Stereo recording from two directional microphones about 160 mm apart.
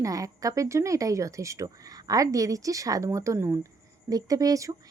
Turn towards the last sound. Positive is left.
turn(degrees=-20)  # may be behind; listen again after turning